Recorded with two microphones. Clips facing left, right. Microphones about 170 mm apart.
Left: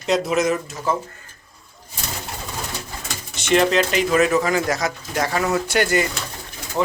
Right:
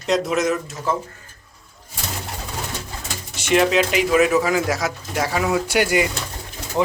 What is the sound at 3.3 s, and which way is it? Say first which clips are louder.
Speech: even; 5° right (ahead or behind).